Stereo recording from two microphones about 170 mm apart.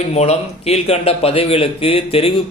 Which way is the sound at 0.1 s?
40° left (ahead or behind).